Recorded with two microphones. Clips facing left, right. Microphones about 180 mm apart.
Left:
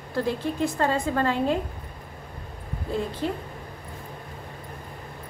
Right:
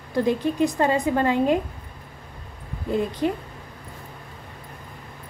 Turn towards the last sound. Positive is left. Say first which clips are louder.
# right 4 dB
turn(degrees=-15)  # may be behind; listen again after turning